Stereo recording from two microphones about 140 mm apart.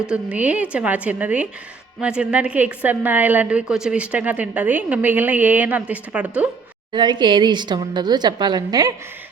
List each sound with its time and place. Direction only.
0.0 s a woman's voice: 10° right (ahead or behind)
6.9 s a woman's voice: 35° right (ahead or behind)